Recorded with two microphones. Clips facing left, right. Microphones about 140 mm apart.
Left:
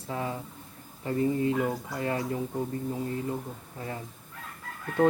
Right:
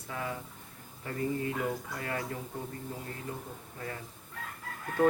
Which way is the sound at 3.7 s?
25° left (ahead or behind).